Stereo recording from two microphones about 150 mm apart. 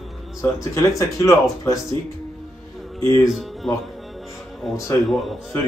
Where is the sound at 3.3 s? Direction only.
Centre (ahead or behind).